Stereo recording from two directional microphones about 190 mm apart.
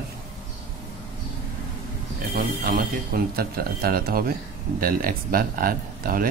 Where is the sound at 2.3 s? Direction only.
50° right (ahead or behind).